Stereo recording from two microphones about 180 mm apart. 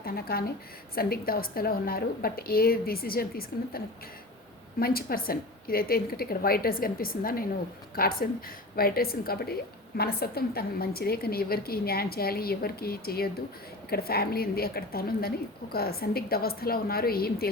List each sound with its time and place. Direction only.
0.0 s a woman's voice: 55° left (ahead or behind)